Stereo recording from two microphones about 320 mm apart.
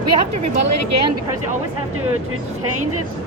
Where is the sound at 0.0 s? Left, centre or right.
Right.